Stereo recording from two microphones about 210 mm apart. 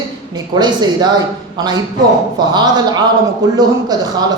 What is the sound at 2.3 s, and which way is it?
A woman's voice, 20° right (ahead or behind).